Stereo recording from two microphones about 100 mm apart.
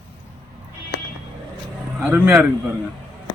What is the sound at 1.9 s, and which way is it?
Speech, 15° right (ahead or behind).